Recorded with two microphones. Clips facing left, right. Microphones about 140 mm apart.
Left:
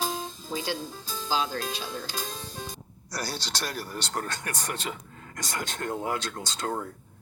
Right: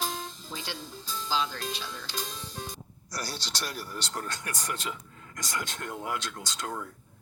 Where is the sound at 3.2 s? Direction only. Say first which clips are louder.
Left 3 dB; 55° left (ahead or behind).